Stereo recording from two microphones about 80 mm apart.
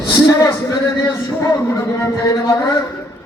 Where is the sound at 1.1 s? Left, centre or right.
Left.